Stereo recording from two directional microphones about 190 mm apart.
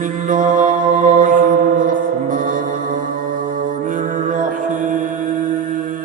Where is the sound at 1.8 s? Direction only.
45° right (ahead or behind).